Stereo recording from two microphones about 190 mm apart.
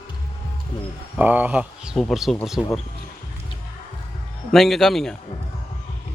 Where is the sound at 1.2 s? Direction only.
10° right (ahead or behind).